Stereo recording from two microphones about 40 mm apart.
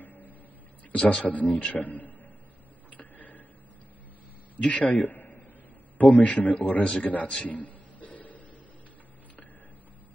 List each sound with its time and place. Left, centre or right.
0.0 s a sound: left
0.9 s speech: left
1.2 s a man's voice: left
2.9 s tick-tock: left
4.6 s a man's voice: left
7.4 s a sound: left